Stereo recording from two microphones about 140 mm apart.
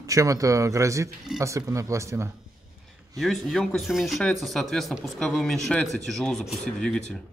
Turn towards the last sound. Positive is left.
turn(degrees=5)  # may be behind; listen again after turning